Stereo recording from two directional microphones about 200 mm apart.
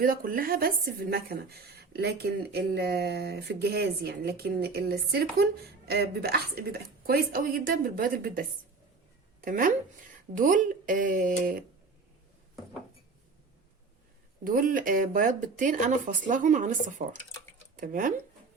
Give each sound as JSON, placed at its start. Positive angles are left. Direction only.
{"t": 0.0, "sound": "a woman's voice", "side_deg": -45}
{"t": 14.4, "sound": "speech", "side_deg": -45}